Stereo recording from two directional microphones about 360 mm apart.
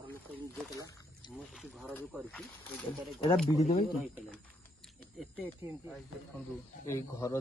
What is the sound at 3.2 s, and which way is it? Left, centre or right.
Speech, centre.